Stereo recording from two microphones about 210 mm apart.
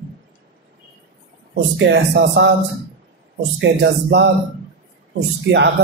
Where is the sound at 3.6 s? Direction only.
55° right (ahead or behind).